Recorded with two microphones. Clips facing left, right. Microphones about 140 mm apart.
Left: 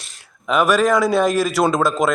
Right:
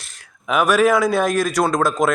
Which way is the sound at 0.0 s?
Centre (ahead or behind).